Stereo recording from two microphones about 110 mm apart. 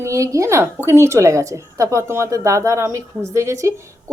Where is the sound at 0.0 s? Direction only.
30° right (ahead or behind).